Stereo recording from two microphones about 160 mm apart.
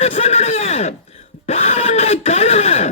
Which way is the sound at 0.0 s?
40° left (ahead or behind).